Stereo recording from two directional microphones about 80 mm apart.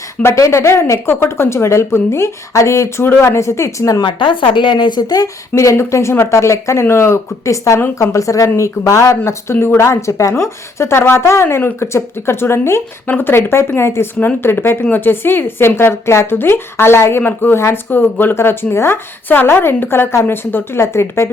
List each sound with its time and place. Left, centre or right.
0.3 s a woman's voice: left
4.0 s a woman's voice: left